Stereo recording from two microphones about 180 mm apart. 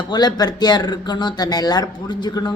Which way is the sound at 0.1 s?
25° left (ahead or behind).